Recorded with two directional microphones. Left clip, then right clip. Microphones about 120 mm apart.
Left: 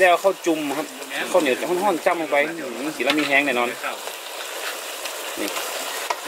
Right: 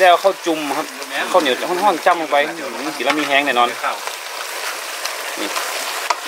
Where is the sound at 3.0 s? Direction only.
30° right (ahead or behind).